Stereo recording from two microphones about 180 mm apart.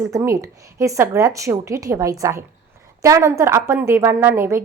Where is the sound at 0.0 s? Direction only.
15° right (ahead or behind).